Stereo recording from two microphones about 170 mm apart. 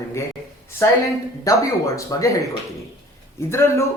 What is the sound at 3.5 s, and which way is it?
Speech, 15° left (ahead or behind).